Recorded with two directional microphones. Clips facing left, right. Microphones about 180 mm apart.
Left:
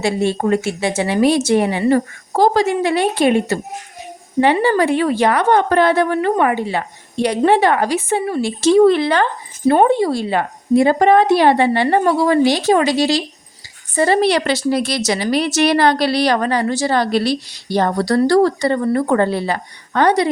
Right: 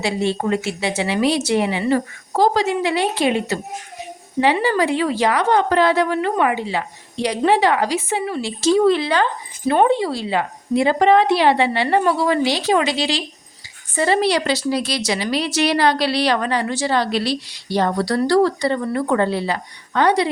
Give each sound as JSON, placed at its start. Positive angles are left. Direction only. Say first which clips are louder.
{"t": 0.0, "sound": "a woman's voice", "louder": "left 3 dB", "side_deg": 50}
{"t": 9.6, "sound": "a woman's voice", "louder": "left 3 dB", "side_deg": 40}